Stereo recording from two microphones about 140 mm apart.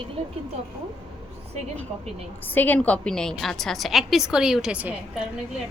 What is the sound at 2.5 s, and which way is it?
A woman's voice, 15° left (ahead or behind).